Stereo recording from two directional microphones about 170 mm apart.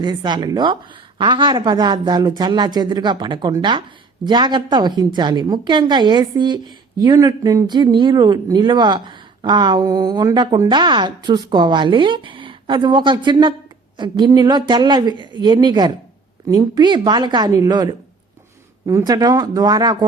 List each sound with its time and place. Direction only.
0.0 s a woman's voice: 25° right (ahead or behind)